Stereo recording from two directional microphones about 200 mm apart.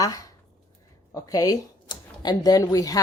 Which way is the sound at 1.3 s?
20° left (ahead or behind).